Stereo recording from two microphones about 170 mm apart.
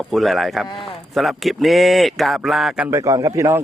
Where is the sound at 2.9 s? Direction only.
20° right (ahead or behind).